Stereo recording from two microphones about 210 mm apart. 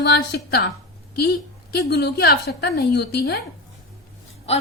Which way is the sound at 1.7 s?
50° left (ahead or behind).